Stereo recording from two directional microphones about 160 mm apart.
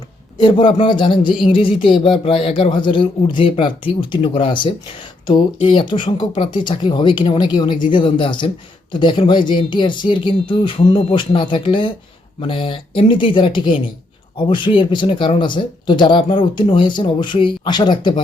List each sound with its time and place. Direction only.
0.4 s speech: 30° left (ahead or behind)